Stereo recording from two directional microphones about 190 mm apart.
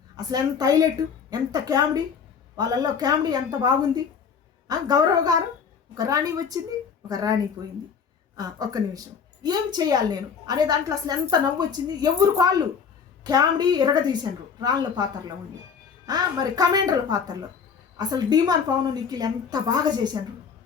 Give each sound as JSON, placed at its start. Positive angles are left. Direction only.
{"t": 0.2, "sound": "a woman's voice", "side_deg": -20}